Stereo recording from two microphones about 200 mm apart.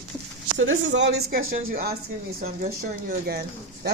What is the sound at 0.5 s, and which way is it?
Speech, 75° right (ahead or behind).